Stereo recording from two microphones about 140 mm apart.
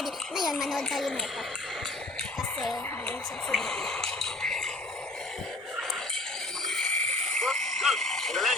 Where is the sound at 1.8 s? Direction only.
5° left (ahead or behind).